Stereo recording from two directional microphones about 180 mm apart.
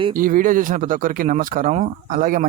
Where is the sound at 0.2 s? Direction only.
50° right (ahead or behind).